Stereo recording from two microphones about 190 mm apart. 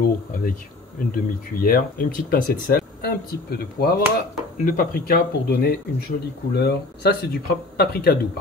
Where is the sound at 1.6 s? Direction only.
50° left (ahead or behind).